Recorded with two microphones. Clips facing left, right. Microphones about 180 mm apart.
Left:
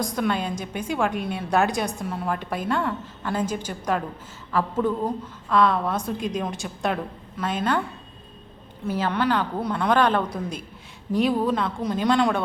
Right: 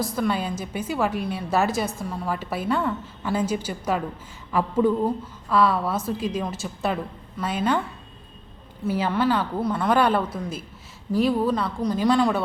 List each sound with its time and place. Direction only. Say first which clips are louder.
0.0 s a woman's voice: even; 5° right (ahead or behind)
8.8 s a woman's voice: right 1 dB; 10° right (ahead or behind)